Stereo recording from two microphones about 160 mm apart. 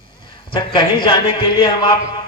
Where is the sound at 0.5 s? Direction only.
30° left (ahead or behind).